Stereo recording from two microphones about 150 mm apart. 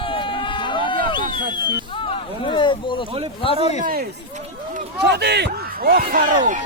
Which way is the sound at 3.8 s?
75° right (ahead or behind).